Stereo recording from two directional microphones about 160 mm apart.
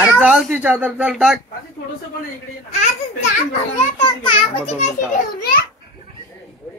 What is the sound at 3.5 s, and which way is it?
Speech, 40° left (ahead or behind).